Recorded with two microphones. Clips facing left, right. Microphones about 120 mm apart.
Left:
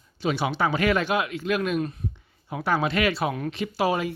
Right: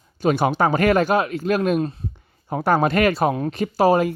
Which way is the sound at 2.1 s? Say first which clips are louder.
Right 7 dB; 45° right (ahead or behind).